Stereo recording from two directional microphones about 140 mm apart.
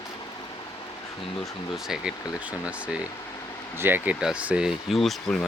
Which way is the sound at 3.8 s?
15° right (ahead or behind).